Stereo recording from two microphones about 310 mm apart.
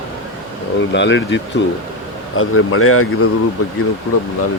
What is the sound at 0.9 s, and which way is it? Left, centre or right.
Speech, left.